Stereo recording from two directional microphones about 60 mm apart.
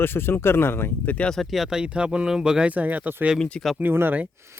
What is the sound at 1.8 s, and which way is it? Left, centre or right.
Speech, centre.